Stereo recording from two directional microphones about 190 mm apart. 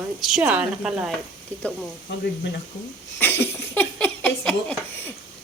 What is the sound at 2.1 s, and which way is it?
Speech, 70° left (ahead or behind).